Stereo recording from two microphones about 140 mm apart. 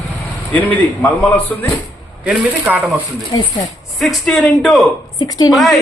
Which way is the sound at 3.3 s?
25° left (ahead or behind).